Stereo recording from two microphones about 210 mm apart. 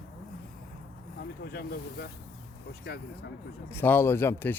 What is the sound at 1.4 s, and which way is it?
Speech, 50° left (ahead or behind).